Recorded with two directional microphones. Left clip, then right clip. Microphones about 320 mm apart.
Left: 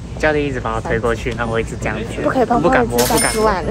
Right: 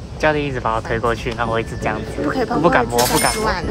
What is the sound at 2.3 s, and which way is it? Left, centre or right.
Speech, centre.